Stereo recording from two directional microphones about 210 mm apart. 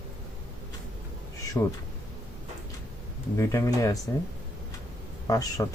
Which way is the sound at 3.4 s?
15° left (ahead or behind).